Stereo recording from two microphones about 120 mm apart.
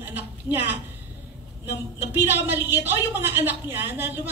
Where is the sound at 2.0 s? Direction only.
20° right (ahead or behind).